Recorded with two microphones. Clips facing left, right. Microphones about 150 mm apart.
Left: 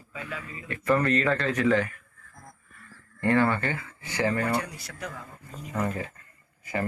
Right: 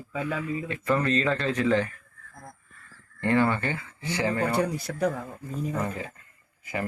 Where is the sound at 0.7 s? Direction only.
20° right (ahead or behind).